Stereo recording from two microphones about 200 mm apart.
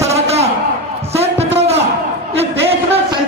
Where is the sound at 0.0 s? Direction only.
30° right (ahead or behind).